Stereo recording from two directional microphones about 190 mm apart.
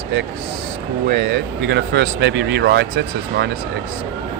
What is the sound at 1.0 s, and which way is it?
Speech, 55° right (ahead or behind).